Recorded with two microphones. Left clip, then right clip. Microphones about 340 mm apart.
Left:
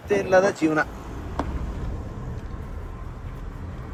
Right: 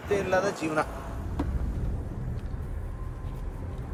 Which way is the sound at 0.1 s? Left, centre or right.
Left.